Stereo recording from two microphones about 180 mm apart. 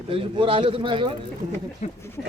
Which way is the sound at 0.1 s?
30° right (ahead or behind).